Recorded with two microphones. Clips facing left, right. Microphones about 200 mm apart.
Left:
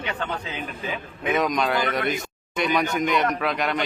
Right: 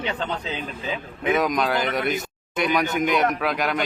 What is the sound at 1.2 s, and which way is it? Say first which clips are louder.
A man's voice: right 1 dB; centre (ahead or behind).